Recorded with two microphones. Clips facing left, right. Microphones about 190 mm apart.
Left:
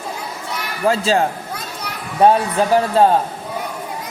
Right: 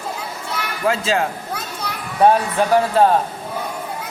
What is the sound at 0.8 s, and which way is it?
Speech, 35° left (ahead or behind).